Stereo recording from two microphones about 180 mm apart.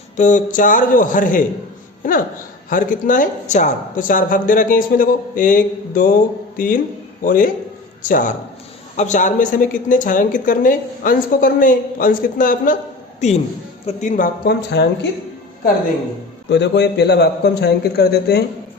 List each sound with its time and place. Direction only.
0.2 s a woman's voice: 45° left (ahead or behind)
2.6 s a woman's voice: 45° left (ahead or behind)
7.3 s a woman's voice: 50° left (ahead or behind)
13.1 s a man's voice: 40° left (ahead or behind)
14.4 s a man's voice: 65° left (ahead or behind)
16.5 s a man's voice: 70° left (ahead or behind)